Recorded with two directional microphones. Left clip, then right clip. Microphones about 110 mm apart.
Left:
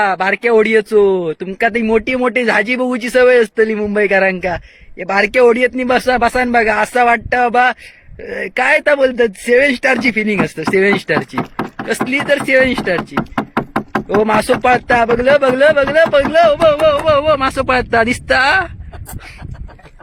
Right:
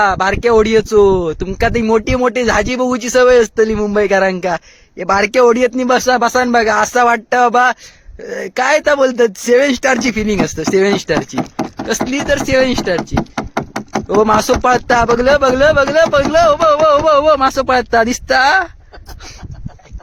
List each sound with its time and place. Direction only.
0.0 s speech: 30° right (ahead or behind)
8.3 s speech: 30° right (ahead or behind)
9.0 s speech: 45° right (ahead or behind)
13.3 s knock: centre (ahead or behind)
14.4 s speech: 45° right (ahead or behind); by 16.0 s 30° right (ahead or behind)
16.1 s speech: 50° right (ahead or behind)
17.1 s speech: 30° right (ahead or behind)